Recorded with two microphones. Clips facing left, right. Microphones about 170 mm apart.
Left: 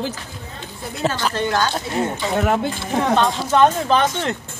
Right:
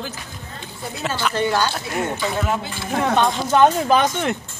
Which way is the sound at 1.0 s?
35° left (ahead or behind).